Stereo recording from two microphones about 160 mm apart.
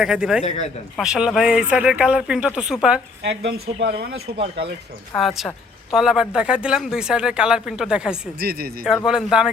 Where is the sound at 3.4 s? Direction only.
85° right.